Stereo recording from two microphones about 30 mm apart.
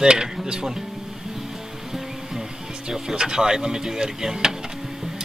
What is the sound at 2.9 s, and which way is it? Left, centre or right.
Speech, right.